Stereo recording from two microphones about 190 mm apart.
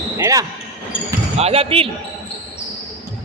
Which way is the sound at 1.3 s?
30° right (ahead or behind).